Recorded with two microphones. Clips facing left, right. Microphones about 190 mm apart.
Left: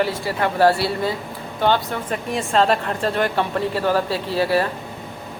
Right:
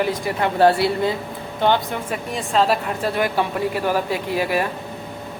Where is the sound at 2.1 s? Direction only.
5° right (ahead or behind).